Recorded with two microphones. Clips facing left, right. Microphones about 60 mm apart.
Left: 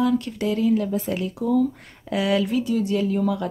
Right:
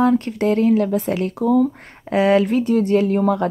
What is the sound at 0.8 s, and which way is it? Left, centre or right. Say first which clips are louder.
Speech: right 5 dB; right.